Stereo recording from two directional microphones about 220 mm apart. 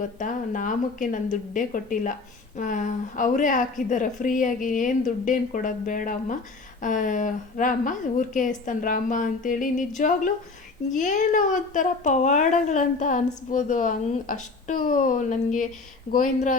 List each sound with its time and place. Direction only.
0.0 s a woman's voice: 35° left (ahead or behind)